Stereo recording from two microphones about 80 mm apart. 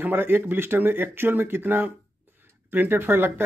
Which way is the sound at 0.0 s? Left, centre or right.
Right.